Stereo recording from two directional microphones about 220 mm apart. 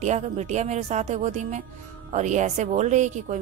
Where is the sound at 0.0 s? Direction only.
30° right (ahead or behind).